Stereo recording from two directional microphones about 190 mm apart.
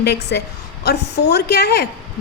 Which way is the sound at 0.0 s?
60° left (ahead or behind).